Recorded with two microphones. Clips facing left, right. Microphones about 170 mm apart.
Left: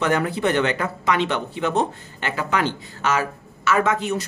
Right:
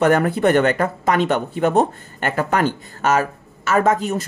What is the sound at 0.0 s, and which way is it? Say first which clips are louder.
Speech: right 5 dB; 50° right (ahead or behind).